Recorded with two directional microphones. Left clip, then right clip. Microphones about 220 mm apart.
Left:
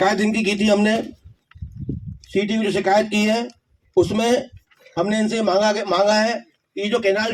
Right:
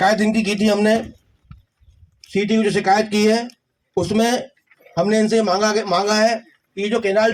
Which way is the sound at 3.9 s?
50° left (ahead or behind).